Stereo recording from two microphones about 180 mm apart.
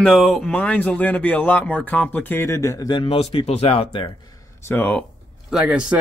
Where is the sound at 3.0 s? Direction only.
35° left (ahead or behind).